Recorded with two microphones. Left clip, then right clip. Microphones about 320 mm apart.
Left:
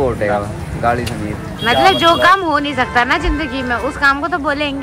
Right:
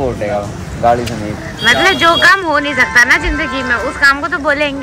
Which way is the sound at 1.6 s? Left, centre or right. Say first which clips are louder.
Right 1 dB; centre.